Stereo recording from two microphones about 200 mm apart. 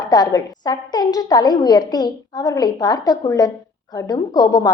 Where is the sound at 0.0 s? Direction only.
20° left (ahead or behind).